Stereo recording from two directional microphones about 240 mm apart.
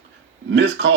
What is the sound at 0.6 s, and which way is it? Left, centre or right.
Speech, right.